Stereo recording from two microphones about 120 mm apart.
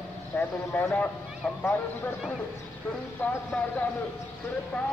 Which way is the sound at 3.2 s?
10° left (ahead or behind).